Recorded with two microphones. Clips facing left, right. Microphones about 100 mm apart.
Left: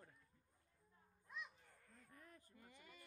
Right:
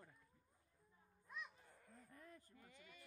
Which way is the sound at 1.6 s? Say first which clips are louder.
Right 3 dB; 10° right (ahead or behind).